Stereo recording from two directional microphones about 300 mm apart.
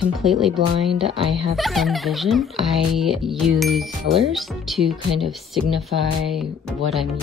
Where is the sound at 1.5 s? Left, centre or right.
Centre.